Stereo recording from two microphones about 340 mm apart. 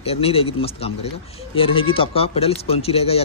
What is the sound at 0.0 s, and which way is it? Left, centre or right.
Speech, centre.